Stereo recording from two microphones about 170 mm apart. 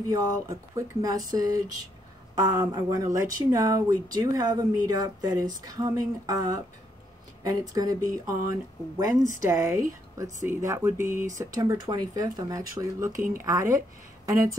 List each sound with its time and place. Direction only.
0.2 s speech: 20° right (ahead or behind)